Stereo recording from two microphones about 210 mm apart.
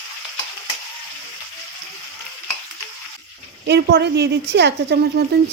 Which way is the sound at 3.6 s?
55° right (ahead or behind).